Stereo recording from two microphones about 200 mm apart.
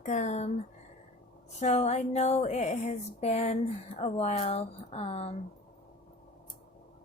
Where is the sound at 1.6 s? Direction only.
35° left (ahead or behind).